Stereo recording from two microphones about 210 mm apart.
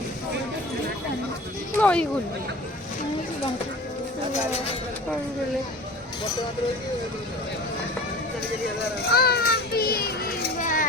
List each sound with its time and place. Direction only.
1.8 s speech: 5° left (ahead or behind)
9.0 s children playing: 50° left (ahead or behind)